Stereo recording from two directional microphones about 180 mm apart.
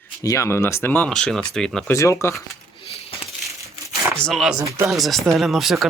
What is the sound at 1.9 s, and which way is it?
Speech, 15° left (ahead or behind).